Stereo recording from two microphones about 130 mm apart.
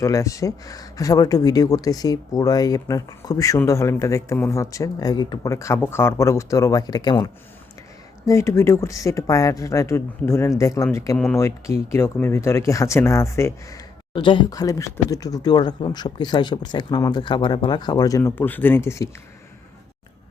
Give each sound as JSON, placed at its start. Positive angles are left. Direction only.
{"t": 0.0, "sound": "speech", "side_deg": 25}
{"t": 8.2, "sound": "speech", "side_deg": 20}
{"t": 14.1, "sound": "speech", "side_deg": 40}
{"t": 14.5, "sound": "speech", "side_deg": 25}
{"t": 18.2, "sound": "speech", "side_deg": 15}